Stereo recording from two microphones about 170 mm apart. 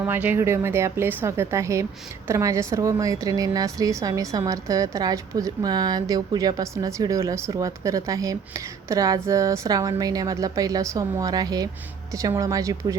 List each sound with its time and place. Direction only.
0.0 s a woman's voice: 10° right (ahead or behind)